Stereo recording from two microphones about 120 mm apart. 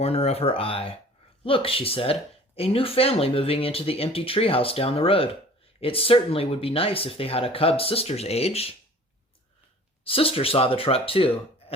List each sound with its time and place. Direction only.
0.0 s speech: 60° left (ahead or behind)
10.0 s speech: 50° left (ahead or behind)